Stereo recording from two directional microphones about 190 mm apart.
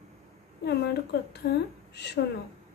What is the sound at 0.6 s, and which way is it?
A woman's voice, 60° left (ahead or behind).